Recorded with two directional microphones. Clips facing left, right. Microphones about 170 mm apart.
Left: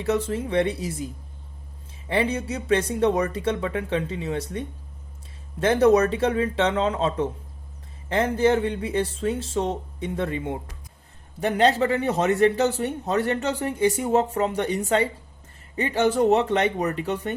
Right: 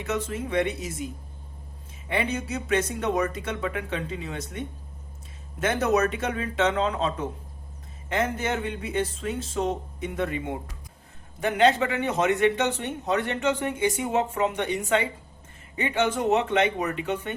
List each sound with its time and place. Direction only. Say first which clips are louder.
0.0 s a man's voice: left 5 dB; 30° left (ahead or behind)
2.0 s a man's voice: left 4 dB; 30° left (ahead or behind)